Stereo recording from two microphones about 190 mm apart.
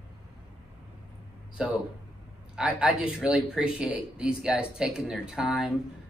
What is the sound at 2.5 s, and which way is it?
Speech, 5° right (ahead or behind).